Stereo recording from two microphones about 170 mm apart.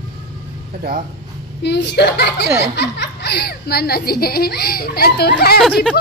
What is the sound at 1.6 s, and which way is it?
A woman's voice, 85° left.